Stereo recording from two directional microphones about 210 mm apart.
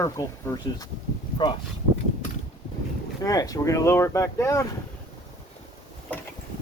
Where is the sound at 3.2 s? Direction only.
15° left (ahead or behind).